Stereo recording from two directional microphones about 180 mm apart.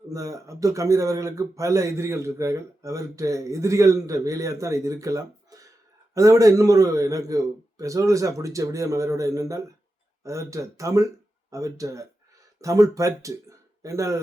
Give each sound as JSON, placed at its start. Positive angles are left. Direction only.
{"t": 0.1, "sound": "speech", "side_deg": -20}